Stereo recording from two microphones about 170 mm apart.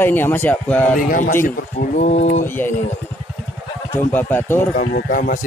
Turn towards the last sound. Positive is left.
turn(degrees=55)  # may be behind; listen again after turning